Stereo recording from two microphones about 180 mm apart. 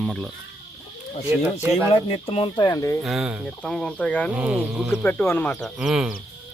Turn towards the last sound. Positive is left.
turn(degrees=0)  # may be behind; listen again after turning